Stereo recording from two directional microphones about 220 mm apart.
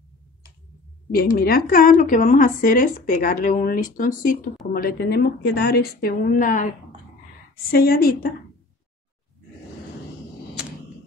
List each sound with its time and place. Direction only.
1.1 s a woman's voice: 40° left (ahead or behind)
7.7 s a woman's voice: 45° left (ahead or behind)